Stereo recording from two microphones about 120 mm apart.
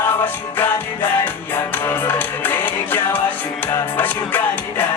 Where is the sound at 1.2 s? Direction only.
15° left (ahead or behind).